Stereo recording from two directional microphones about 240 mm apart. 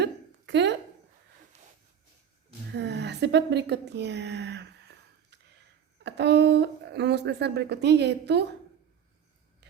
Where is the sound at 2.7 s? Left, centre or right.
Right.